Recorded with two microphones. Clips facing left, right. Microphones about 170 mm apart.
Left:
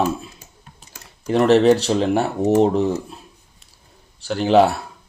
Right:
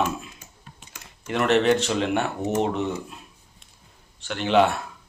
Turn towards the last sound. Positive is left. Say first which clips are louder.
# left 5 dB
turn(degrees=35)  # may be behind; listen again after turning